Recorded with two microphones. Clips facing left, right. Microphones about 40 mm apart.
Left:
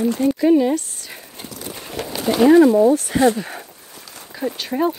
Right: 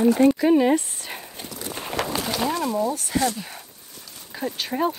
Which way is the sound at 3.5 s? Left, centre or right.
Left.